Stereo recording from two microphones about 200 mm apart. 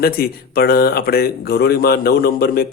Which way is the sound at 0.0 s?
50° left (ahead or behind).